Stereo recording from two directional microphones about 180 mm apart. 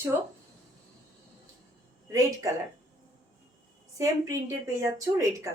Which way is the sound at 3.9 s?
15° right (ahead or behind).